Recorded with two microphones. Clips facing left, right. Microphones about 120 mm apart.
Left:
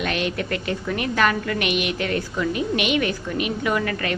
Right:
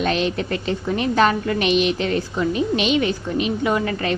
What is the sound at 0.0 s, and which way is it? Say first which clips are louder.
A woman's voice: right 4 dB; 30° right (ahead or behind).